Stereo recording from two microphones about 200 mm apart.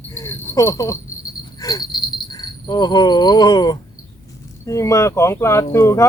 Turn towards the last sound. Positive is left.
turn(degrees=15)  # may be behind; listen again after turning